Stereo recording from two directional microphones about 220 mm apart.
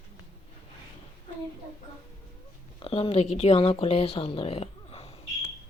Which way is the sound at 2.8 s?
25° left (ahead or behind).